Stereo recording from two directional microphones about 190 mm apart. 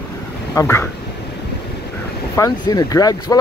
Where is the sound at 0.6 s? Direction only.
15° left (ahead or behind).